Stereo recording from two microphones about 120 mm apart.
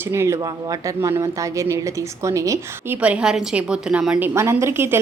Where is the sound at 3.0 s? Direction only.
10° right (ahead or behind).